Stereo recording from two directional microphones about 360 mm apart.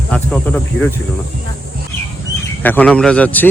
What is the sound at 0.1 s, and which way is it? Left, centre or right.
Speech, centre.